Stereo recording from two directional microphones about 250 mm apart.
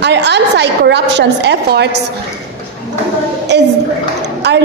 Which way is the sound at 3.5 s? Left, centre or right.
Right.